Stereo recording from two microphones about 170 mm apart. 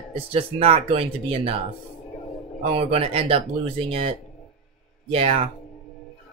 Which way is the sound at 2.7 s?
35° right (ahead or behind).